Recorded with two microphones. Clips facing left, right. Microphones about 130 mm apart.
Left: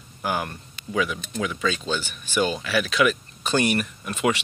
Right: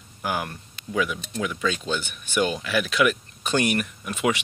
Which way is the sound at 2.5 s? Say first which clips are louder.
Left 1 dB; centre (ahead or behind).